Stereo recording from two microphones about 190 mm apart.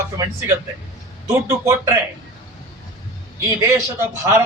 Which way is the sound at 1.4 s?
15° right (ahead or behind).